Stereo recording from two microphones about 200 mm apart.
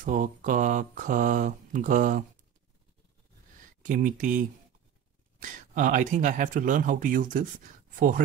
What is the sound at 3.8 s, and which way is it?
Speech, 40° right (ahead or behind).